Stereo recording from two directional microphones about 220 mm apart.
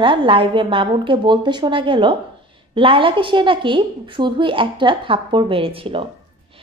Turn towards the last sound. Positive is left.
turn(degrees=-25)  # may be behind; listen again after turning